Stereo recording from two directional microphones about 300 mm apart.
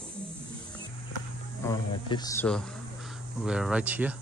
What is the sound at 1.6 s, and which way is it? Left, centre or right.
A man's voice, centre.